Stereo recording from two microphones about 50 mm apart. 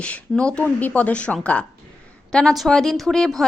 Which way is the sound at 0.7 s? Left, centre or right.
Left.